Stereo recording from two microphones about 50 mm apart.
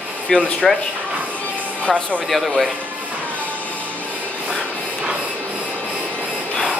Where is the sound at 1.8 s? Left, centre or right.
Left.